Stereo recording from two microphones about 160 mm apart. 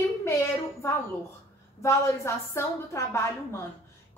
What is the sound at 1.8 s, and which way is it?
A woman's voice, 15° left (ahead or behind).